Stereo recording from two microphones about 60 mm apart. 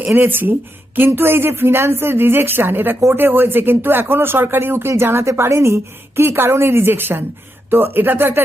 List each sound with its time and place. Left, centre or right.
0.1 s speech: right